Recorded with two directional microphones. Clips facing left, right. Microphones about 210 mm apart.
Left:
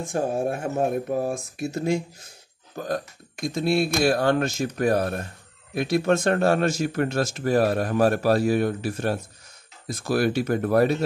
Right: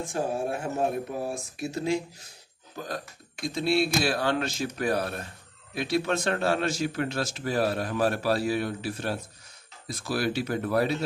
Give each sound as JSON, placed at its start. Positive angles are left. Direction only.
{"t": 0.0, "sound": "speech", "side_deg": 45}